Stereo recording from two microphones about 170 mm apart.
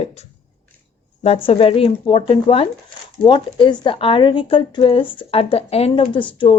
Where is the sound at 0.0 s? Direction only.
40° left (ahead or behind).